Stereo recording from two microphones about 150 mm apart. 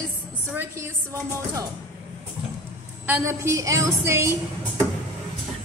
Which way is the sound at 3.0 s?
15° right (ahead or behind).